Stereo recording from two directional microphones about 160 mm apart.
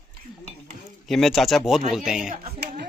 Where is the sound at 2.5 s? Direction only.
80° right.